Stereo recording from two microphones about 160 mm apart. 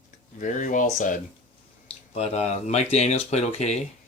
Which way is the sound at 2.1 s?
40° left (ahead or behind).